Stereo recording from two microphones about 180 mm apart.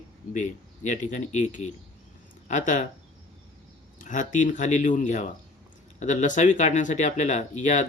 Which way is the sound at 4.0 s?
45° left (ahead or behind).